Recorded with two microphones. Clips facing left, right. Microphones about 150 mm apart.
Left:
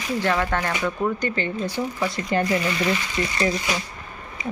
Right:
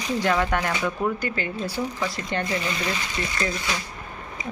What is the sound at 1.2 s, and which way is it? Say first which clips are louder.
Speech: left 3 dB; 5° right (ahead or behind).